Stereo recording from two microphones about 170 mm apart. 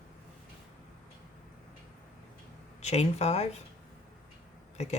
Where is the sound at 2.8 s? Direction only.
40° left (ahead or behind).